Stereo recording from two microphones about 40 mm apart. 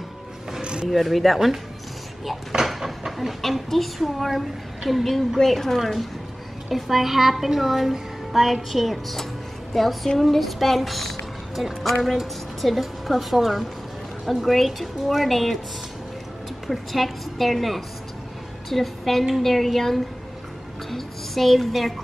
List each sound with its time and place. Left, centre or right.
0.6 s a sound: right
0.8 s a woman's voice: centre
2.6 s speech: centre
6.7 s a woman's voice: centre
16.6 s a woman's voice: centre
20.9 s music: centre